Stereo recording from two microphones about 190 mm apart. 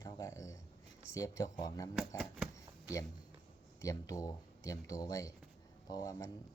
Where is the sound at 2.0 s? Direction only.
5° right (ahead or behind).